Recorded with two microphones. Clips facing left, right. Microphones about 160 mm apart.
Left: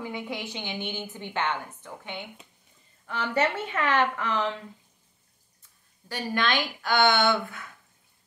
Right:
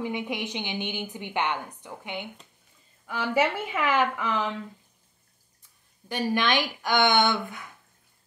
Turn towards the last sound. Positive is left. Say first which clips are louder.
# even
turn(degrees=-15)  # may be behind; listen again after turning